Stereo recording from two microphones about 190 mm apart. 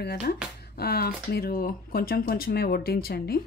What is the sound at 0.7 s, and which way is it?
Speech, 55° left (ahead or behind).